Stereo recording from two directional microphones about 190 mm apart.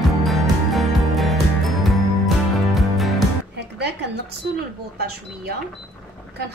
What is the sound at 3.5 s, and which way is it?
Music, 60° right (ahead or behind).